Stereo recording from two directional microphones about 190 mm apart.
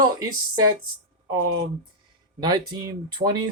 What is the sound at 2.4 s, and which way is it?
Speech, 25° right (ahead or behind).